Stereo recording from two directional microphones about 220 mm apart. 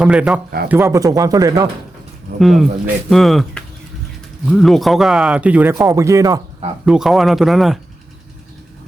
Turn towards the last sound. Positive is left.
turn(degrees=0)  # may be behind; listen again after turning